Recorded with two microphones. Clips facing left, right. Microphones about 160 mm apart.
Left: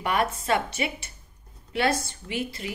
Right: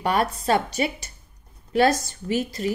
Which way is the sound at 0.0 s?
35° right (ahead or behind).